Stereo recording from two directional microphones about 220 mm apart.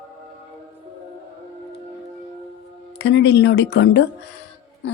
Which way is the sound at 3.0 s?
55° left (ahead or behind).